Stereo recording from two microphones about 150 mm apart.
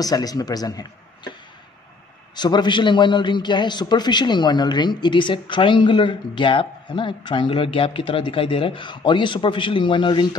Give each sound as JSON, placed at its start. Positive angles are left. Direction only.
{"t": 0.0, "sound": "a man's voice", "side_deg": 25}
{"t": 2.3, "sound": "a man's voice", "side_deg": 30}